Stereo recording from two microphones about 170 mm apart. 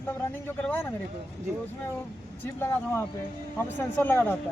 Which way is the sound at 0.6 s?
10° left (ahead or behind).